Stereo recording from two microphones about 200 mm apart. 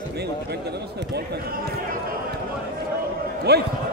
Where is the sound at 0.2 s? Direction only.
55° right (ahead or behind).